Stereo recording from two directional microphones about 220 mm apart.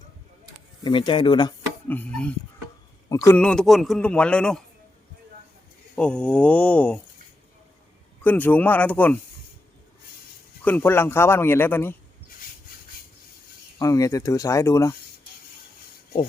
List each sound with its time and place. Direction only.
0.9 s speech: 20° left (ahead or behind)
1.9 s a man's voice: 5° left (ahead or behind)
6.0 s a man's voice: 5° left (ahead or behind)
8.2 s a man's voice: 10° left (ahead or behind)
10.6 s a man's voice: 10° left (ahead or behind)
13.7 s a man's voice: 15° left (ahead or behind)